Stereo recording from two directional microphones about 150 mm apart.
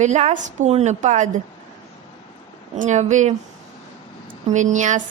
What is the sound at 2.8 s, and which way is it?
Speech, 50° right (ahead or behind).